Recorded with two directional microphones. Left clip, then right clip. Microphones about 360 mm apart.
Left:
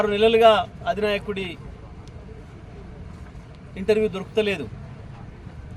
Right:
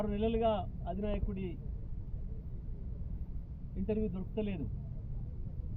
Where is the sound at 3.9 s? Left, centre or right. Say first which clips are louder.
Left 17 dB; left.